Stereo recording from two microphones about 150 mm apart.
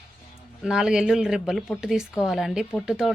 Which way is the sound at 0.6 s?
5° right (ahead or behind).